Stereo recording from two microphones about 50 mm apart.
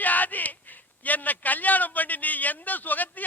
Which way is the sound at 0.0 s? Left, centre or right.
Left.